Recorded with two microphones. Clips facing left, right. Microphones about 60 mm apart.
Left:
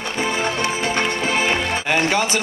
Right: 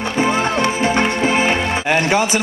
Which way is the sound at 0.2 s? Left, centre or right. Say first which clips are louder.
Right 5 dB; right.